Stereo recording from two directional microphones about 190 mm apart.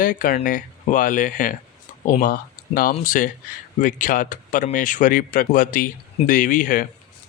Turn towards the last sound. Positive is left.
turn(degrees=45)  # may be behind; listen again after turning